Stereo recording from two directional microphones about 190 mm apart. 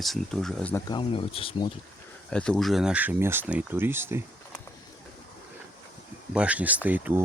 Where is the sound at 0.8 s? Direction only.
25° left (ahead or behind).